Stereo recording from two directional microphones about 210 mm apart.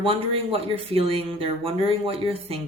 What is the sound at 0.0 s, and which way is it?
Speech, 25° right (ahead or behind).